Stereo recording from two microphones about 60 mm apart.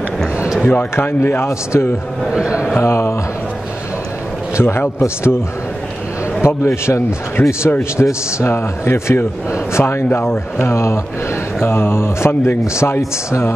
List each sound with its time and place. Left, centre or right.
0.9 s a man's voice: left
2.2 s a man's voice: centre
2.7 s speech: left
4.6 s a man's voice: left
6.4 s a man's voice: left
10.0 s a man's voice: left